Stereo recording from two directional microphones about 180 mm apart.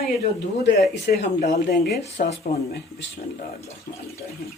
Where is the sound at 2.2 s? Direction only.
50° left (ahead or behind).